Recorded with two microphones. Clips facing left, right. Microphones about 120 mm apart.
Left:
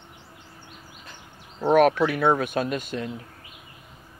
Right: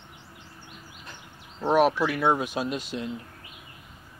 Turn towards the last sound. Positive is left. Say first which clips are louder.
# left 2 dB
turn(degrees=50)  # may be behind; listen again after turning